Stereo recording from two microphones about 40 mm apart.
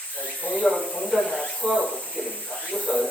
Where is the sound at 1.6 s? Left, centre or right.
Left.